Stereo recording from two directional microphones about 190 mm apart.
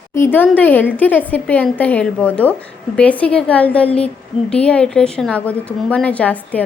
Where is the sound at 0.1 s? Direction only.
10° left (ahead or behind).